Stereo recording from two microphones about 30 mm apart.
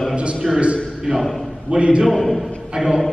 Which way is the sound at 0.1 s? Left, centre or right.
Right.